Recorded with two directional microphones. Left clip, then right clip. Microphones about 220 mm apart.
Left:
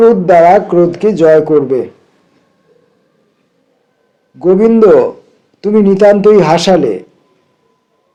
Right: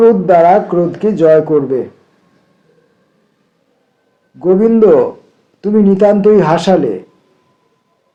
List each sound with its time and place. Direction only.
0.0 s speech: 25° left (ahead or behind)
4.4 s speech: 25° left (ahead or behind)